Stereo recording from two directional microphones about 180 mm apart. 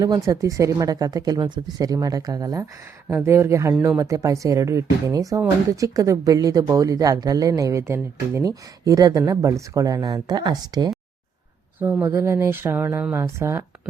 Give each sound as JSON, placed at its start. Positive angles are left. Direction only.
{"t": 0.0, "sound": "speech", "side_deg": -20}
{"t": 11.8, "sound": "speech", "side_deg": -10}